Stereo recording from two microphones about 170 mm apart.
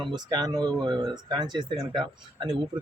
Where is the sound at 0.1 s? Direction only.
20° right (ahead or behind).